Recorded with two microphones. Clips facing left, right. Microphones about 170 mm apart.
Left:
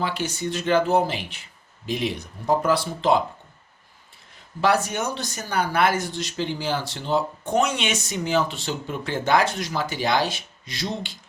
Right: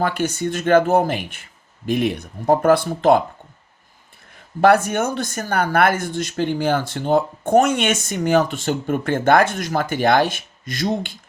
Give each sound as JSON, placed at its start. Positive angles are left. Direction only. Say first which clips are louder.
{"t": 0.0, "sound": "speech", "louder": "right 6 dB", "side_deg": -50}
{"t": 4.6, "sound": "speech", "louder": "right 7 dB", "side_deg": -55}